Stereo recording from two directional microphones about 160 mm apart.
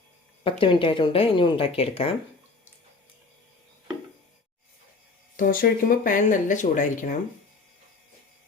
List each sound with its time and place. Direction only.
0.4 s speech: 35° left (ahead or behind)
5.4 s speech: 60° left (ahead or behind)